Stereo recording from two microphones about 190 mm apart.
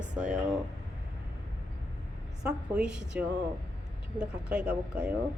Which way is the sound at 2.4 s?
5° right (ahead or behind).